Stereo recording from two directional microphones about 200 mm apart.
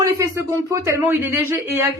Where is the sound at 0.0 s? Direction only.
15° right (ahead or behind).